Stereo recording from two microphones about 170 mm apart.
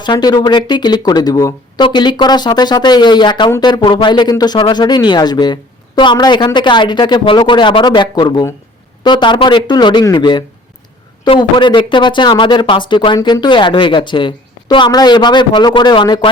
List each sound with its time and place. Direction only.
0.0 s speech: 25° left (ahead or behind)